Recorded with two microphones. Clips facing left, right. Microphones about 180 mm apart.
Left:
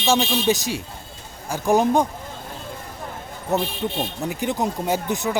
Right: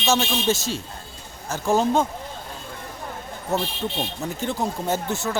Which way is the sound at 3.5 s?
15° left (ahead or behind).